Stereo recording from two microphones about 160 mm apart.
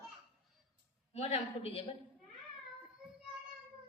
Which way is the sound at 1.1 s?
40° left (ahead or behind).